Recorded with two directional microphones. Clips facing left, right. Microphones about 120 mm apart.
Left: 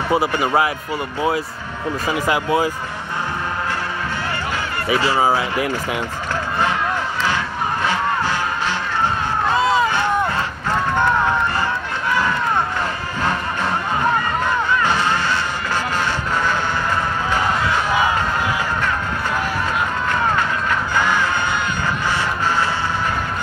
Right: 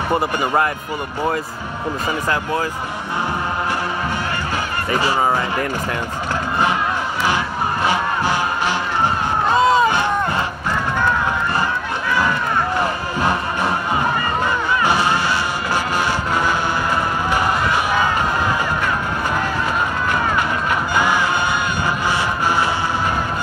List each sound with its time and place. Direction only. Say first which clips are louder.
0.1 s speech: left 1 dB; centre (ahead or behind)
2.0 s speech: left 3 dB; 10° left (ahead or behind)
4.9 s speech: left 1 dB; 15° right (ahead or behind)
5.2 s speech: left 1 dB; 5° left (ahead or behind)
7.8 s music: right 1 dB; 15° right (ahead or behind)
9.5 s a sound: right 3 dB; 20° right (ahead or behind)
13.2 s music: right 2 dB; 15° right (ahead or behind)
14.8 s music: right 1 dB; 10° right (ahead or behind)
20.9 s music: right 1 dB; 10° right (ahead or behind)